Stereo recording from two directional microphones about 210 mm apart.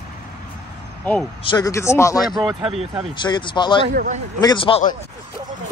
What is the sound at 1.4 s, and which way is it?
Speech, 20° left (ahead or behind).